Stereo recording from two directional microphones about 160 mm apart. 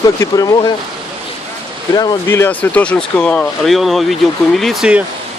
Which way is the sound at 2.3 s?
15° left (ahead or behind).